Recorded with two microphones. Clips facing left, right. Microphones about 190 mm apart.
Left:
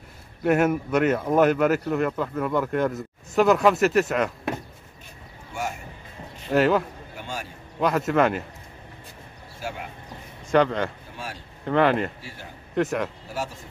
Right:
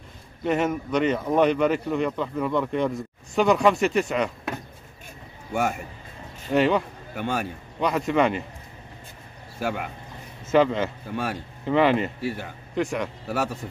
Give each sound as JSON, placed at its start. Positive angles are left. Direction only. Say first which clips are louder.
{"t": 0.4, "sound": "speech", "louder": "left 3 dB", "side_deg": 10}
{"t": 5.5, "sound": "a man's voice", "louder": "right 6 dB", "side_deg": -60}
{"t": 6.5, "sound": "speech", "louder": "left 1 dB", "side_deg": 0}
{"t": 7.2, "sound": "a man's voice", "louder": "right 8 dB", "side_deg": -60}
{"t": 7.8, "sound": "speech", "louder": "left 1 dB", "side_deg": 0}
{"t": 9.6, "sound": "speech", "louder": "right 6 dB", "side_deg": -60}
{"t": 10.4, "sound": "speech", "louder": "right 1 dB", "side_deg": -5}
{"t": 12.2, "sound": "a man's voice", "louder": "right 12 dB", "side_deg": -60}
{"t": 12.7, "sound": "speech", "louder": "left 2 dB", "side_deg": 0}
{"t": 13.3, "sound": "a man's voice", "louder": "right 5 dB", "side_deg": -65}